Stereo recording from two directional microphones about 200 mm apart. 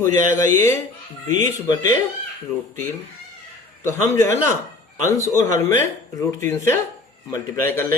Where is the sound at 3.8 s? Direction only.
15° left (ahead or behind).